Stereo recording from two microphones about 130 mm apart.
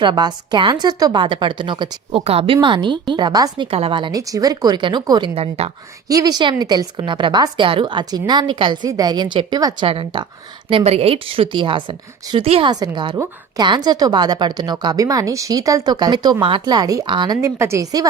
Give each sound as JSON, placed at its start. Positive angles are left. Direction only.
{"t": 0.0, "sound": "a woman's voice", "side_deg": -35}
{"t": 3.7, "sound": "a woman's voice", "side_deg": -45}
{"t": 4.2, "sound": "a woman's voice", "side_deg": -25}
{"t": 5.3, "sound": "a woman's voice", "side_deg": -50}
{"t": 6.1, "sound": "a woman's voice", "side_deg": -30}
{"t": 9.8, "sound": "a woman's voice", "side_deg": -40}
{"t": 17.4, "sound": "a woman's voice", "side_deg": -20}